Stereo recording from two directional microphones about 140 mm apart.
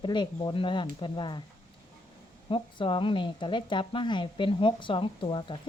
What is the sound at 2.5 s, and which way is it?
Speech, 40° left (ahead or behind).